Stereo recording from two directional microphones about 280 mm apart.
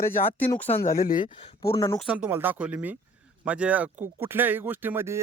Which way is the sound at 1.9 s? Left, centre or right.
Centre.